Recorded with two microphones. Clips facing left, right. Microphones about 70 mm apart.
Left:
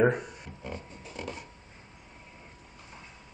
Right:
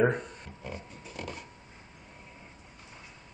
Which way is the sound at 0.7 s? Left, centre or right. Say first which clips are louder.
Left 1 dB; centre.